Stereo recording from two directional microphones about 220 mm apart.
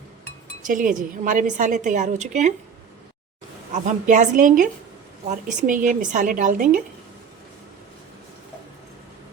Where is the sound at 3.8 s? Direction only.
35° right (ahead or behind).